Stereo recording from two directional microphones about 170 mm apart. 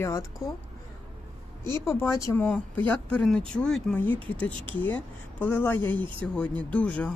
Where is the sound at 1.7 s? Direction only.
15° left (ahead or behind).